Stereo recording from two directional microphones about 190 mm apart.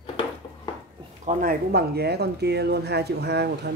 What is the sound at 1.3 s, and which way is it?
Speech, 50° right (ahead or behind).